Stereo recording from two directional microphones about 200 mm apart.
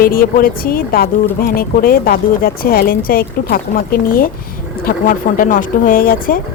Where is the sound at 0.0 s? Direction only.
45° left (ahead or behind).